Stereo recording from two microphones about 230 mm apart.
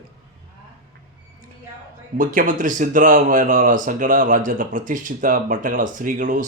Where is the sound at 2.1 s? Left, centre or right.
Right.